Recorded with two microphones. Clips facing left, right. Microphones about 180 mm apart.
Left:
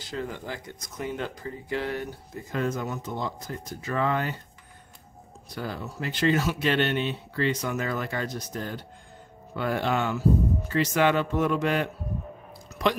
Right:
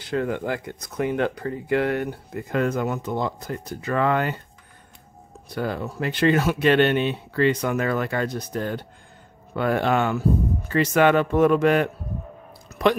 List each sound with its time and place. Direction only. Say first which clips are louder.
0.0 s speech: right 9 dB; 60° right (ahead or behind)
5.5 s speech: right 7 dB; 60° right (ahead or behind)